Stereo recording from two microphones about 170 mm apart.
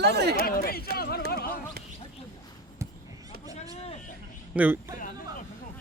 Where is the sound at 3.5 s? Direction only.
40° left (ahead or behind).